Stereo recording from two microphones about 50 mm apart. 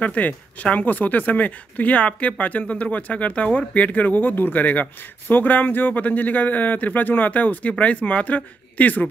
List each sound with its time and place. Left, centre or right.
0.0 s speech: left